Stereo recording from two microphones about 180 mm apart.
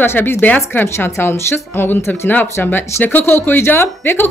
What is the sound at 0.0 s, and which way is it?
Speech, 10° left (ahead or behind).